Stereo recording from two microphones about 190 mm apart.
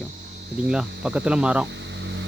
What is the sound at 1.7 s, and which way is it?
Vehicle, 65° right (ahead or behind).